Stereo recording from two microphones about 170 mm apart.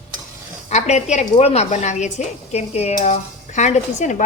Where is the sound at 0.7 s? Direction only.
40° left (ahead or behind).